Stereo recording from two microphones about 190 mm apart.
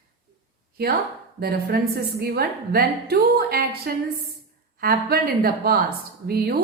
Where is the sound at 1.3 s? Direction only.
55° right (ahead or behind).